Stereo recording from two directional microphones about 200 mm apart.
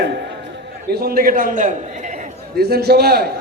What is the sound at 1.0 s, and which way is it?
A woman's voice, 45° right (ahead or behind).